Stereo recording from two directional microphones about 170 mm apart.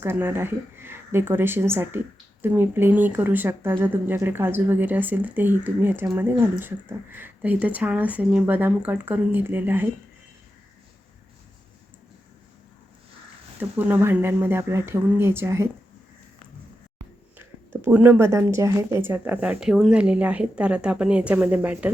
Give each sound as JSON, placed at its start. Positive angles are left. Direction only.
{"t": 0.0, "sound": "speech", "side_deg": -15}
{"t": 13.6, "sound": "speech", "side_deg": -10}
{"t": 17.3, "sound": "speech", "side_deg": -10}